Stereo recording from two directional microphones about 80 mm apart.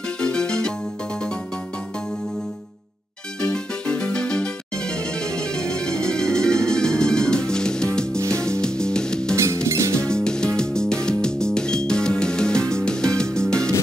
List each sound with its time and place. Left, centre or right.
0.2 s music: centre
3.3 s music: centre
9.3 s music: right
9.9 s music: centre